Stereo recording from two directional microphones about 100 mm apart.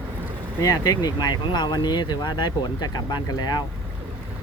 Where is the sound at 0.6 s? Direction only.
40° left (ahead or behind).